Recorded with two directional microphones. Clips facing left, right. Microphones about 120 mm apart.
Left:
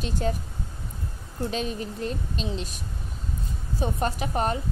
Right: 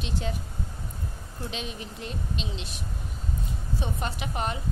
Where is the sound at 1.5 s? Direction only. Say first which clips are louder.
Left 7 dB; 40° left (ahead or behind).